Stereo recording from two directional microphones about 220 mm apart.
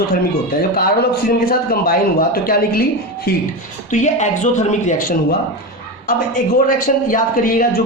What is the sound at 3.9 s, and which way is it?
Speech, 35° left (ahead or behind).